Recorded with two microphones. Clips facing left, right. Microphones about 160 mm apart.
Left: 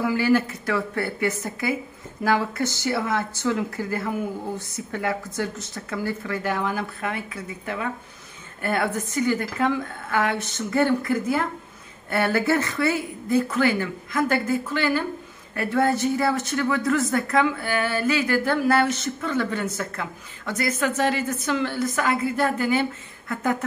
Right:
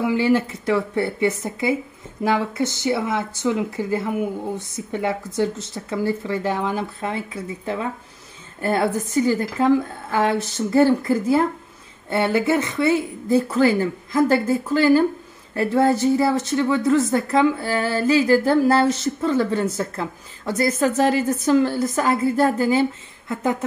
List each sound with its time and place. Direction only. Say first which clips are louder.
0.0 s a woman's voice: right 2 dB; 25° right (ahead or behind)
21.0 s a woman's voice: right 5 dB; 40° right (ahead or behind)
22.4 s a woman's voice: right 5 dB; 25° right (ahead or behind)